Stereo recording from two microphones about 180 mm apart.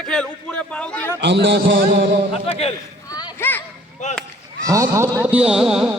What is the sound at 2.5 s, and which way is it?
Speech, 30° left (ahead or behind).